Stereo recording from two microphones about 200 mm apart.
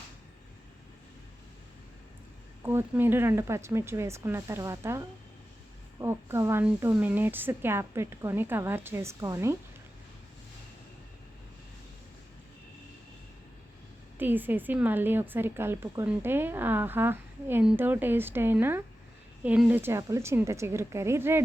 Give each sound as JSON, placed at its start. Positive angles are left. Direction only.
{"t": 2.6, "sound": "a woman's voice", "side_deg": -10}
{"t": 14.2, "sound": "a woman's voice", "side_deg": -10}